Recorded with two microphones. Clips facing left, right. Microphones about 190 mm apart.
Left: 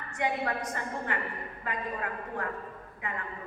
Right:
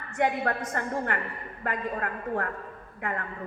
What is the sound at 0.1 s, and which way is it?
A woman's voice, 50° right (ahead or behind).